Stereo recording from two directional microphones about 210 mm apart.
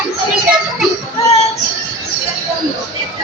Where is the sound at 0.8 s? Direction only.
Centre (ahead or behind).